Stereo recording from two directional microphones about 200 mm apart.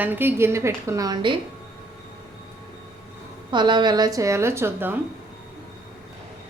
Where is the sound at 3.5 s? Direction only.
20° right (ahead or behind).